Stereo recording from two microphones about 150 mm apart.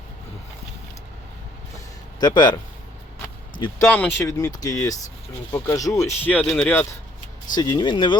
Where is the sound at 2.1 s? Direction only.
30° left (ahead or behind).